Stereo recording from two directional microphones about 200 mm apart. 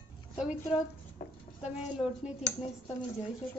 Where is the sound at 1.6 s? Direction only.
35° left (ahead or behind).